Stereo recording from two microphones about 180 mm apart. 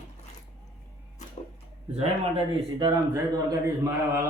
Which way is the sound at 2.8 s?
20° right (ahead or behind).